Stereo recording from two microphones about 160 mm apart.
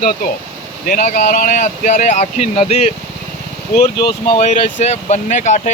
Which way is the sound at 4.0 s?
30° left (ahead or behind).